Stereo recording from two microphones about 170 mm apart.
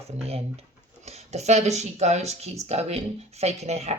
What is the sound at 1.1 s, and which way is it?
Speech, 40° right (ahead or behind).